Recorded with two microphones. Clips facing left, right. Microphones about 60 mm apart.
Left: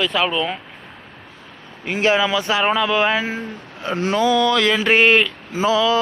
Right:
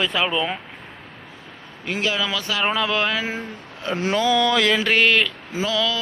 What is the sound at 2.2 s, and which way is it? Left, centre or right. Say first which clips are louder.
Speech: left 5 dB; centre.